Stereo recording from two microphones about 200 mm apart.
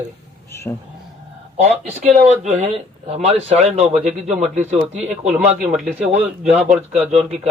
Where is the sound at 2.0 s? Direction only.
35° right (ahead or behind).